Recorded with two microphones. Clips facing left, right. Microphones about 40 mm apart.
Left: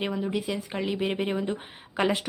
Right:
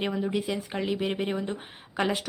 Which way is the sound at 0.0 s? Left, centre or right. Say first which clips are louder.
Even; centre.